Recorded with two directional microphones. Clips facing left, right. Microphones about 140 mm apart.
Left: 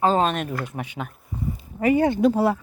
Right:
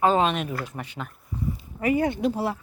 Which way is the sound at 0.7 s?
60° left (ahead or behind).